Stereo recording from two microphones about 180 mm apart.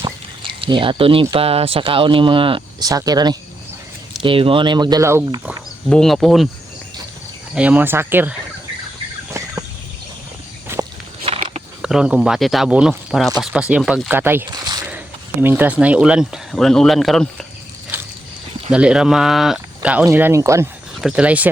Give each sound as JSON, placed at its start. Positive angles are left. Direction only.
{"t": 0.0, "sound": "speech", "side_deg": -25}
{"t": 5.9, "sound": "speech", "side_deg": 5}
{"t": 7.5, "sound": "speech", "side_deg": -5}
{"t": 9.4, "sound": "a sound", "side_deg": -15}
{"t": 11.8, "sound": "speech", "side_deg": -5}
{"t": 14.8, "sound": "speech", "side_deg": -10}
{"t": 18.7, "sound": "speech", "side_deg": -5}